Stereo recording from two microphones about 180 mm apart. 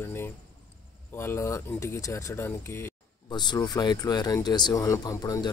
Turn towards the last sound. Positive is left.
turn(degrees=20)  # may be behind; listen again after turning